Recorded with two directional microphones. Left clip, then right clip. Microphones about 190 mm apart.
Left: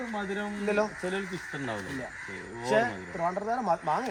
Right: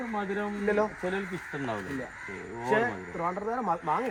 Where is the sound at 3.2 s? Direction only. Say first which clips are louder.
Left 2 dB; 30° left (ahead or behind).